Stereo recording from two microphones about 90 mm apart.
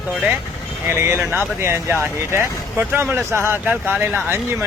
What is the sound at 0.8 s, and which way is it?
Speech, 25° right (ahead or behind).